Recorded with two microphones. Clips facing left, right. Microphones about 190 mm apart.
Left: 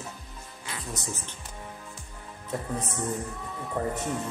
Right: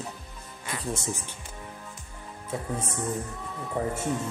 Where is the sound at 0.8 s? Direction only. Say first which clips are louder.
Right 6 dB; 25° right (ahead or behind).